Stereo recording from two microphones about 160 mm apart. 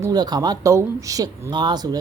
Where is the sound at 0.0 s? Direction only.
25° right (ahead or behind).